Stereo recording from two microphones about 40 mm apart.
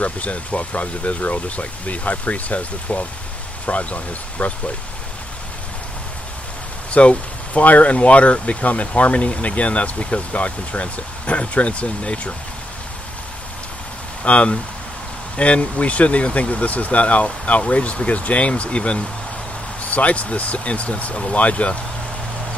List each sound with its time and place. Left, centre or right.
0.0 s speech: left
6.9 s speech: left
14.2 s speech: left